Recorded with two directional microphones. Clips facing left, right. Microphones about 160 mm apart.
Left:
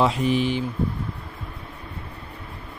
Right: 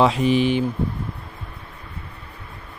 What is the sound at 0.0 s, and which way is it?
Speech, 90° right.